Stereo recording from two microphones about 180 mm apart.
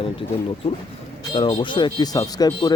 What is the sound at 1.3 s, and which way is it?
Speech, 25° left (ahead or behind).